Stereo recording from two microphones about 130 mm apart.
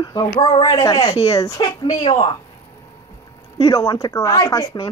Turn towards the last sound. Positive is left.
turn(degrees=25)  # may be behind; listen again after turning